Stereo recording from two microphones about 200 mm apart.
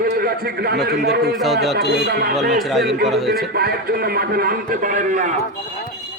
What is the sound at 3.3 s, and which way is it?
A man's voice, 50° right (ahead or behind).